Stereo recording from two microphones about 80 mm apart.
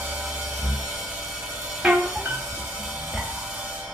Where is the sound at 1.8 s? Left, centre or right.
Centre.